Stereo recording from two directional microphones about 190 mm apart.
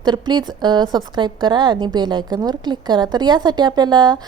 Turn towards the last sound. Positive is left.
turn(degrees=-25)  # may be behind; listen again after turning